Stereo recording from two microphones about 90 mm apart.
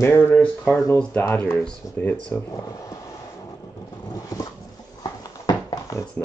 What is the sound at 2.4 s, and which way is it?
Speech, 35° left (ahead or behind).